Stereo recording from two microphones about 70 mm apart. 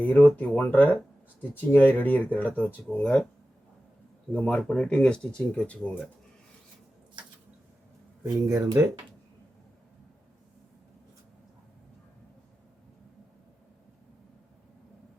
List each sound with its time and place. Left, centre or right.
0.0 s speech: left
4.3 s speech: centre
8.2 s speech: right